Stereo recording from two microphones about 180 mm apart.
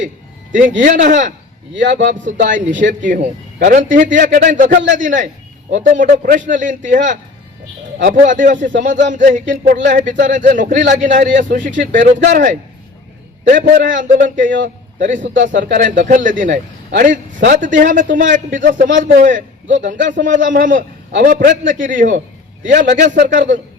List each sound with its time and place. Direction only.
0.8 s speech: 45° right (ahead or behind)
2.0 s speech: 80° right
2.2 s a man's voice: 45° right (ahead or behind)